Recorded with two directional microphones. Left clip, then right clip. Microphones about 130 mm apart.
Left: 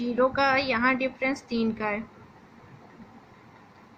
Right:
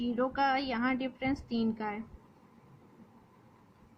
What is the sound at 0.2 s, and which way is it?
A woman's voice, 50° right (ahead or behind).